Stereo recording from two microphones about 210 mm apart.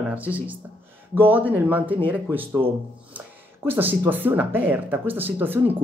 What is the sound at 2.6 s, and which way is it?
Speech, 25° right (ahead or behind).